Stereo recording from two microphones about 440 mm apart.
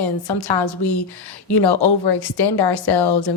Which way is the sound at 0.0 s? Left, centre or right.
Left.